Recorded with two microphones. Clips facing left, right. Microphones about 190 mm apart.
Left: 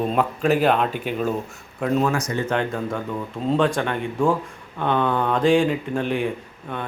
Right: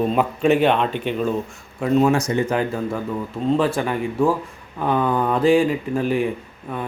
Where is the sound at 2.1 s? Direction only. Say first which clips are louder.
Right 5 dB; 25° right (ahead or behind).